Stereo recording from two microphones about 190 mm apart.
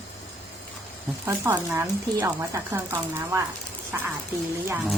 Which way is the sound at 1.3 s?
10° right (ahead or behind).